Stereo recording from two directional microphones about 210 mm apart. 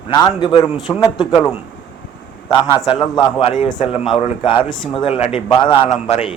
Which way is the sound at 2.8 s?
20° left (ahead or behind).